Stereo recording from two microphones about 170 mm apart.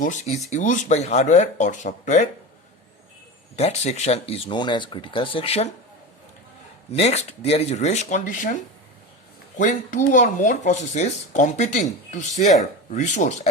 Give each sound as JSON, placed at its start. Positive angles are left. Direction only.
{"t": 0.0, "sound": "speech", "side_deg": 45}
{"t": 3.6, "sound": "speech", "side_deg": 40}
{"t": 6.9, "sound": "speech", "side_deg": 40}
{"t": 9.6, "sound": "speech", "side_deg": 50}